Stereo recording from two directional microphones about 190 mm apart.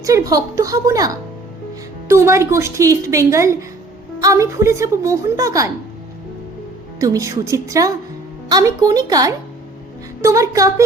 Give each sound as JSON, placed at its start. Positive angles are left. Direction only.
{"t": 0.0, "sound": "speech", "side_deg": -15}
{"t": 7.0, "sound": "a woman's voice", "side_deg": -15}